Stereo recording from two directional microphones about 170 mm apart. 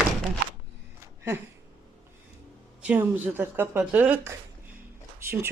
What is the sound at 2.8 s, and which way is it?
A woman's voice, 10° right (ahead or behind).